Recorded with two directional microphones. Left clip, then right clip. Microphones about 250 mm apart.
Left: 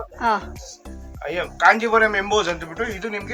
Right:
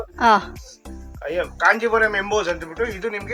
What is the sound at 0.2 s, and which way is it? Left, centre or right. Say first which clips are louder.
Speech: right 6 dB; centre.